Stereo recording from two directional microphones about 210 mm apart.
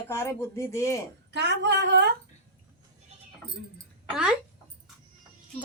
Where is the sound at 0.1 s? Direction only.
10° left (ahead or behind).